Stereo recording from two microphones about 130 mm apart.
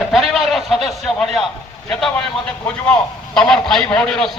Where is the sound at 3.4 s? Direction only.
5° left (ahead or behind).